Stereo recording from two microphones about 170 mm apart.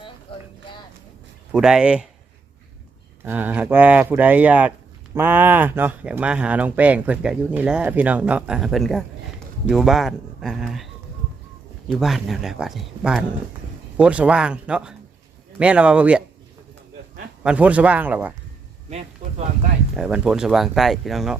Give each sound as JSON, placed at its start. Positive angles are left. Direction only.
{"t": 0.3, "sound": "a sound", "side_deg": 30}
{"t": 1.5, "sound": "speech", "side_deg": -5}
{"t": 3.2, "sound": "speech", "side_deg": -10}
{"t": 11.9, "sound": "speech", "side_deg": 0}
{"t": 17.4, "sound": "speech", "side_deg": -5}
{"t": 19.2, "sound": "speech", "side_deg": -40}
{"t": 20.0, "sound": "speech", "side_deg": -5}